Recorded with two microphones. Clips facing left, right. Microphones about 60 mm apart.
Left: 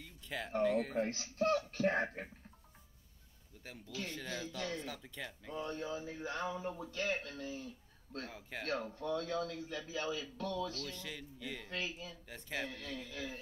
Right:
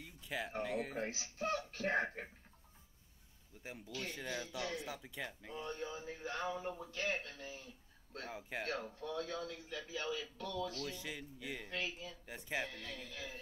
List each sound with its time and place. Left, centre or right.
0.0 s speech: centre
1.8 s speech: centre
3.6 s a man's voice: centre
7.1 s speech: right
8.6 s a man's voice: centre
10.9 s speech: centre
11.8 s a man's voice: centre
12.3 s speech: centre
12.6 s a man's voice: centre